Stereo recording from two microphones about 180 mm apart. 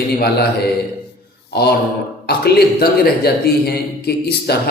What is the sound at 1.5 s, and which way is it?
Speech, 65° left (ahead or behind).